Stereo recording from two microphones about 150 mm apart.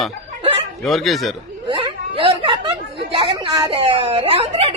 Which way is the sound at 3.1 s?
35° right (ahead or behind).